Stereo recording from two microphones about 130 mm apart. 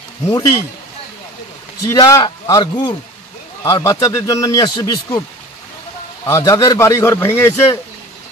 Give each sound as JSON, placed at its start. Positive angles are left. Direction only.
{"t": 0.3, "sound": "speech", "side_deg": 25}
{"t": 1.8, "sound": "speech", "side_deg": 25}
{"t": 6.2, "sound": "speech", "side_deg": 25}